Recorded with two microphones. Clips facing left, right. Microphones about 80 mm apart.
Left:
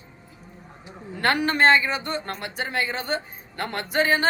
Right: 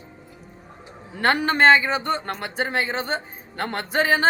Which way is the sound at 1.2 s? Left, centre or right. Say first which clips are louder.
Right 2 dB; right.